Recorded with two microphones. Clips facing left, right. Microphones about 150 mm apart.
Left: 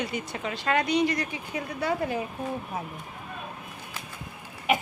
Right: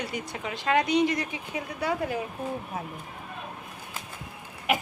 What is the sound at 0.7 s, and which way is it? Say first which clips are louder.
Speech: right 2 dB; 20° right (ahead or behind).